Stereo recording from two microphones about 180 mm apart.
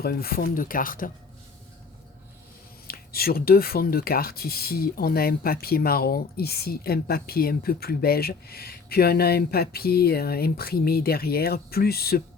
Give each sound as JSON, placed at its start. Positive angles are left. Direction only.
{"t": 0.0, "sound": "speech", "side_deg": 55}
{"t": 2.8, "sound": "speech", "side_deg": 55}